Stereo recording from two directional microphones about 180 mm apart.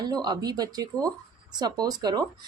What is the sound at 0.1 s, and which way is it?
Speech, 20° right (ahead or behind).